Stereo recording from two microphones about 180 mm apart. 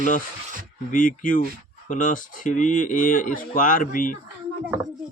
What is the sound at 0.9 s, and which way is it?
Speech, 45° left (ahead or behind).